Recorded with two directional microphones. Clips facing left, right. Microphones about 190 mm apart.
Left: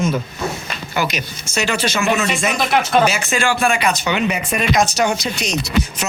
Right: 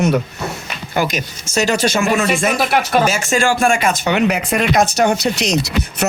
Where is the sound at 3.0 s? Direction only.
45° right (ahead or behind).